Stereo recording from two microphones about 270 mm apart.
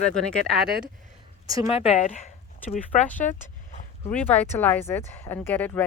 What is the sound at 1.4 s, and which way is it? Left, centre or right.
Speech, centre.